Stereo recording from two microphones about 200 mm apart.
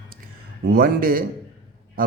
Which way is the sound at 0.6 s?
50° right (ahead or behind).